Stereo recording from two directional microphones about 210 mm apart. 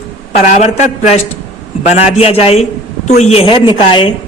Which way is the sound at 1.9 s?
30° left (ahead or behind).